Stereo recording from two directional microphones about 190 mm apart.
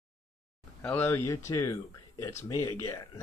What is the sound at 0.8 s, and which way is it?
Speech, 10° left (ahead or behind).